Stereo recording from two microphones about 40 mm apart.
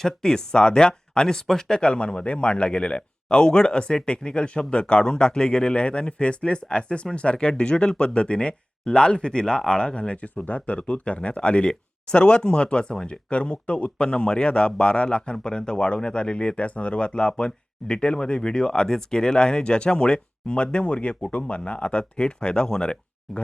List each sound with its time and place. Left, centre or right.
0.0 s speech: centre
10.4 s speech: left; by 23.4 s centre